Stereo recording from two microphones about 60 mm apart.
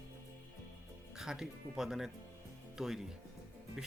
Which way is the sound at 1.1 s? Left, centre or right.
Centre.